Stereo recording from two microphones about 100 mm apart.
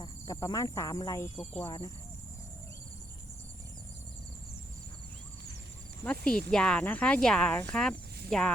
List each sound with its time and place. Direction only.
0.0 s speech: 40° left (ahead or behind)
6.1 s speech: 10° left (ahead or behind)